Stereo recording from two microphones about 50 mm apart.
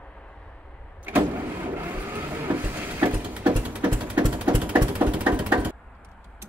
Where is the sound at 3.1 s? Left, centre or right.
Right.